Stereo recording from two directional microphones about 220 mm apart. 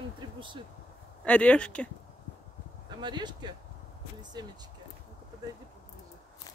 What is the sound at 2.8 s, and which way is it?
Speech, 20° right (ahead or behind).